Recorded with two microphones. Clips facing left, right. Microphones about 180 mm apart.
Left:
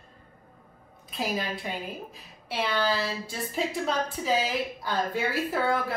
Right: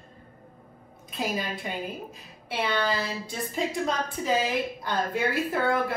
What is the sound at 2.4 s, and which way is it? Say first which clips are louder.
Speech: even; centre (ahead or behind).